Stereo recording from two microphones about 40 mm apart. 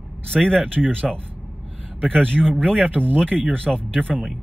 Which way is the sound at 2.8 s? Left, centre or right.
Right.